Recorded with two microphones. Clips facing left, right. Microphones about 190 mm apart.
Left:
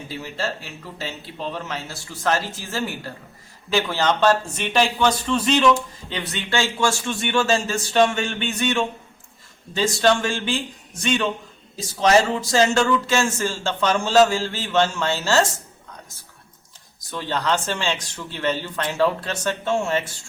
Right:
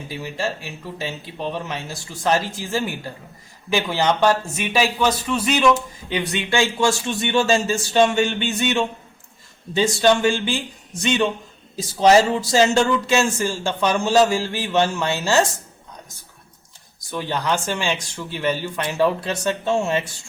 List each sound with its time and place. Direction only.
0.1 s speech: 15° right (ahead or behind)
9.7 s speech: 20° right (ahead or behind)
11.9 s speech: 15° right (ahead or behind)
17.1 s speech: 15° right (ahead or behind)